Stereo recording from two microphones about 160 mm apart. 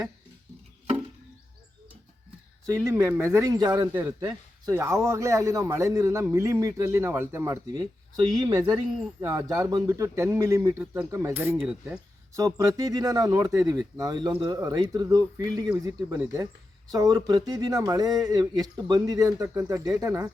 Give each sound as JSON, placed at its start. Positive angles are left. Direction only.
{"t": 2.8, "sound": "speech", "side_deg": -15}
{"t": 3.9, "sound": "speech", "side_deg": -10}
{"t": 12.4, "sound": "speech", "side_deg": -20}